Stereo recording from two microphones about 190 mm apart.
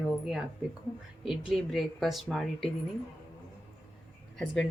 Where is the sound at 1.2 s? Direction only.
5° right (ahead or behind).